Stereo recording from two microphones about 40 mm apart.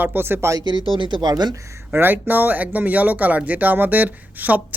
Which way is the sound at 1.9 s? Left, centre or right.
Right.